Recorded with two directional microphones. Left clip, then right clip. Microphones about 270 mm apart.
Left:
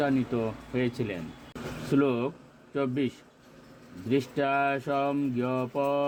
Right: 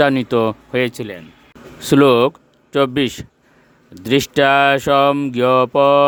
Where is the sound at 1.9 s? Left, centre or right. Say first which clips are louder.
Right 15 dB; right.